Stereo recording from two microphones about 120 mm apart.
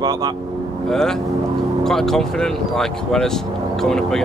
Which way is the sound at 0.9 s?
5° left (ahead or behind).